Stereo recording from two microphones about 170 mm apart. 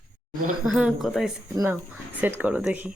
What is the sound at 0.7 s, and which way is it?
Speech, centre (ahead or behind).